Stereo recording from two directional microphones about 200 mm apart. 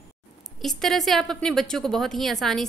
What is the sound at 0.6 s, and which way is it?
A woman's voice, centre (ahead or behind).